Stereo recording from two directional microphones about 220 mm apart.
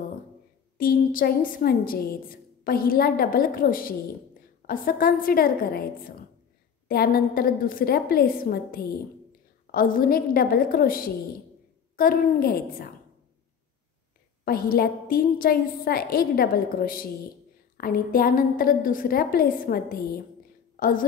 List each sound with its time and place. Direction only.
0.7 s a woman's voice: 40° left (ahead or behind)
14.4 s a woman's voice: 45° left (ahead or behind)